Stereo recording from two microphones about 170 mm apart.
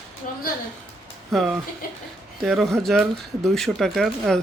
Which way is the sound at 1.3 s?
Centre (ahead or behind).